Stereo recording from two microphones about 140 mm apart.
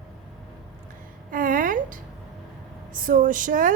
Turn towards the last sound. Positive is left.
turn(degrees=-70)  # may be behind; listen again after turning